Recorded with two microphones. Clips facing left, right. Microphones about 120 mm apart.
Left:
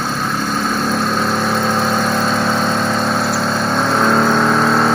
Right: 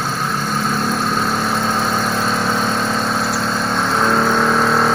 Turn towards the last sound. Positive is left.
turn(degrees=0)  # may be behind; listen again after turning